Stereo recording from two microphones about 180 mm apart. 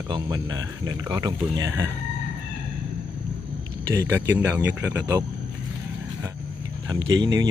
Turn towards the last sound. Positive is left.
turn(degrees=-20)  # may be behind; listen again after turning